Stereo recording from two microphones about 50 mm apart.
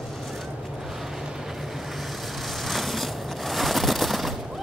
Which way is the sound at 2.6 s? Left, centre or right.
Centre.